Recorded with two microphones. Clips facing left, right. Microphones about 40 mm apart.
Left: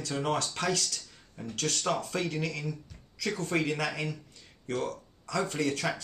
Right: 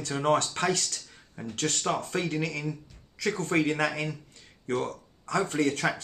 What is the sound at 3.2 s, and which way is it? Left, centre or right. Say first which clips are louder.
Speech: right 4 dB; right.